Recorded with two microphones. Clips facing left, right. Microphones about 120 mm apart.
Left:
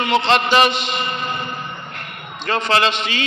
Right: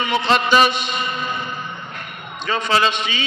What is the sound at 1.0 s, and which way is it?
Music, 55° left (ahead or behind).